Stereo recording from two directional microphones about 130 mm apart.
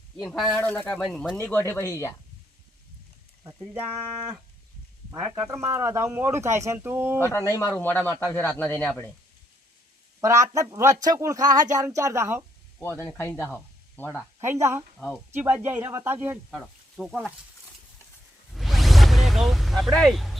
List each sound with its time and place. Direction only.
0.2 s speech: 5° left (ahead or behind)
1.4 s speech: 15° left (ahead or behind)
5.1 s speech: 30° right (ahead or behind)
7.2 s speech: 20° left (ahead or behind)
10.2 s speech: 25° right (ahead or behind)
12.8 s speech: 20° left (ahead or behind)
14.4 s speech: 20° right (ahead or behind)
14.9 s speech: centre (ahead or behind)
15.3 s speech: 15° right (ahead or behind)
17.0 s speech: centre (ahead or behind)
18.5 s a sound: centre (ahead or behind)